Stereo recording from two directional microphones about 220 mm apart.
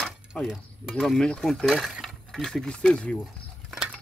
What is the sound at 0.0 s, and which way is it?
Speech, centre (ahead or behind).